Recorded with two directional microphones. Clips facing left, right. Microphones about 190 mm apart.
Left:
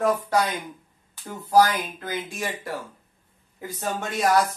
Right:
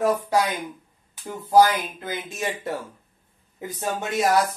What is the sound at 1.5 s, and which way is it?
A man's voice, 25° right (ahead or behind).